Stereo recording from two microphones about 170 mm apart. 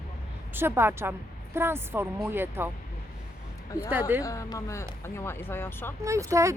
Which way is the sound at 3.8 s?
10° right (ahead or behind).